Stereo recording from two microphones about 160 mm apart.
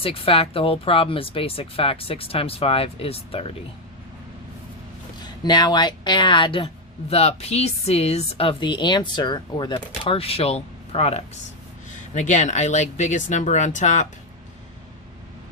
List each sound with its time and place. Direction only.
0.0 s a woman's voice: 35° left (ahead or behind)
5.2 s a woman's voice: 25° left (ahead or behind)
12.1 s speech: 50° left (ahead or behind)